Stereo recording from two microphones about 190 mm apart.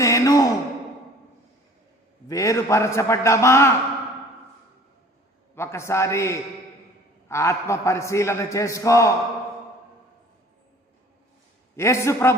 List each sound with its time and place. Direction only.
0.0 s sigh: 20° left (ahead or behind)
2.2 s a man's voice: 15° left (ahead or behind)
5.5 s a man's voice: 15° left (ahead or behind)
11.8 s a man's voice: 15° left (ahead or behind)